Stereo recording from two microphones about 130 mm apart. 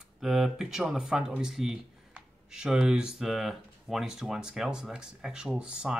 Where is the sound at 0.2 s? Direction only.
5° right (ahead or behind).